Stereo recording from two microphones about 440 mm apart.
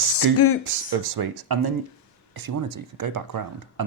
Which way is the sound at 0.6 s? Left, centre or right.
Right.